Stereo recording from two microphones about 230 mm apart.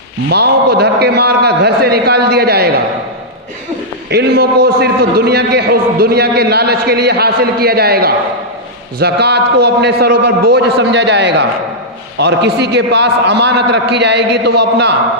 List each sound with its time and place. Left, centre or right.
0.3 s a man's voice: right
4.1 s a man's voice: right